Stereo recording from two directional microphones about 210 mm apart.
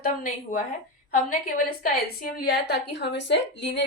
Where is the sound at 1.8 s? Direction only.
45° left (ahead or behind).